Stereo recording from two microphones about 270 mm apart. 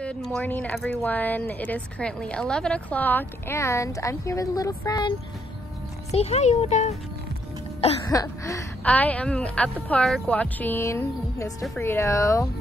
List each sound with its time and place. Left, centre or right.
0.0 s speech: centre
6.1 s a woman's voice: left